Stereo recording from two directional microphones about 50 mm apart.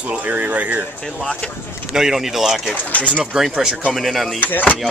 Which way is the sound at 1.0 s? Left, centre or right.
Centre.